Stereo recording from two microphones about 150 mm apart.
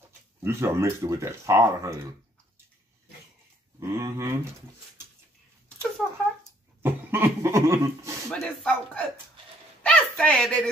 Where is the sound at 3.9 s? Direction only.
20° right (ahead or behind).